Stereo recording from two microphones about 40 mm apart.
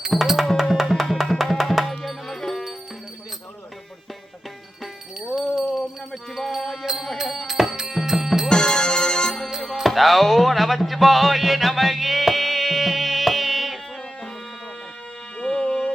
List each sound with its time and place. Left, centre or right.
0.1 s music: centre
5.5 s a sound: centre
6.9 s a sound: centre
7.4 s music: centre
8.4 s music: left
9.7 s music: centre
15.4 s music: centre